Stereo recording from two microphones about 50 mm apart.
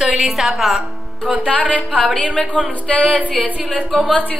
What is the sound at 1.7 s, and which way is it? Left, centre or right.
Speech, left.